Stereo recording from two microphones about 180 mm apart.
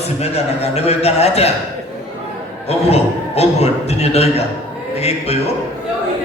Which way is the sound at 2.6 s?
35° left (ahead or behind).